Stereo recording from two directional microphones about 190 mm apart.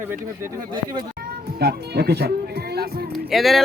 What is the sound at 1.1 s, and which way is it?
Music, 55° right (ahead or behind).